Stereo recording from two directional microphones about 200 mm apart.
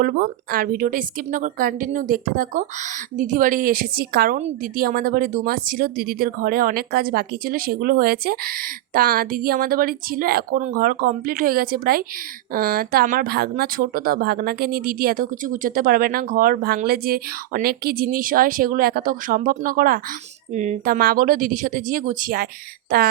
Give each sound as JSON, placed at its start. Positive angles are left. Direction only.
{"t": 0.0, "sound": "speech", "side_deg": -50}